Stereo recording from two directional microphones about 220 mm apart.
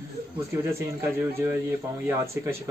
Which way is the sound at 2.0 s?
10° right (ahead or behind).